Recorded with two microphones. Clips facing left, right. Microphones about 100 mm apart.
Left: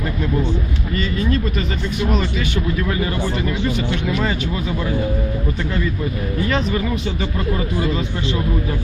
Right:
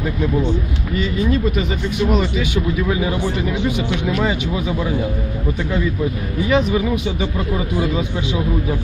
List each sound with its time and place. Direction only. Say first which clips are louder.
0.9 s speech: right 2 dB; 5° right (ahead or behind)
6.4 s speech: right 5 dB; 5° right (ahead or behind)